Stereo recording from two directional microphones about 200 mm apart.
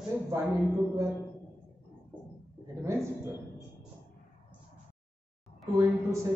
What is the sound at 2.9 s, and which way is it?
Speech, 15° right (ahead or behind).